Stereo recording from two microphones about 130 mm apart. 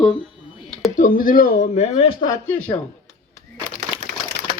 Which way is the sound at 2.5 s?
15° left (ahead or behind).